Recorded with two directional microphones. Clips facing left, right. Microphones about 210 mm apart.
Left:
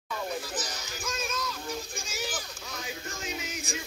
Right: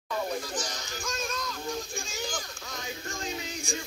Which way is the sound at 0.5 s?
5° left (ahead or behind).